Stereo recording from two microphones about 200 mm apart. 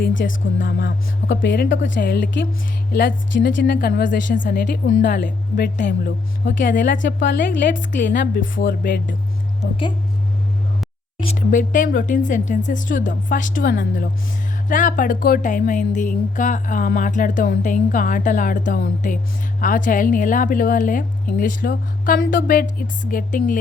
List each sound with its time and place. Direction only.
0.1 s music: 70° left (ahead or behind)
0.6 s speech: 45° left (ahead or behind)
1.5 s a woman's voice: 65° left (ahead or behind)
2.0 s a woman's voice: 45° left (ahead or behind)
5.7 s speech: 40° left (ahead or behind)
6.9 s a woman's voice: 65° left (ahead or behind)
8.8 s speech: 45° left (ahead or behind)
11.3 s speech: 40° left (ahead or behind)